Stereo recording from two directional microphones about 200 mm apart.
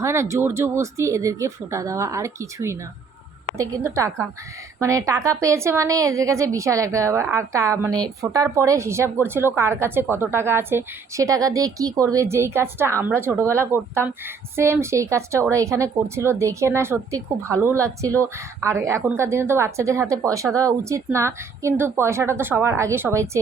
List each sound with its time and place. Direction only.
0.0 s a woman's voice: 15° right (ahead or behind)